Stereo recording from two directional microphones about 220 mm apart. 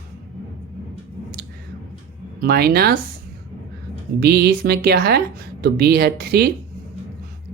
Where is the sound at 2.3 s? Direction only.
45° right (ahead or behind).